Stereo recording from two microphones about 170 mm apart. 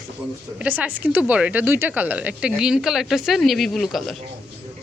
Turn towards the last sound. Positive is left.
turn(degrees=0)  # may be behind; listen again after turning